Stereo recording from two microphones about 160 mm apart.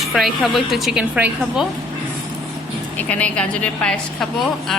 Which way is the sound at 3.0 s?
10° left (ahead or behind).